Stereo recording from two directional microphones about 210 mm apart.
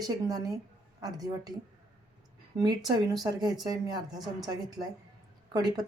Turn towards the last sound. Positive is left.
turn(degrees=-20)  # may be behind; listen again after turning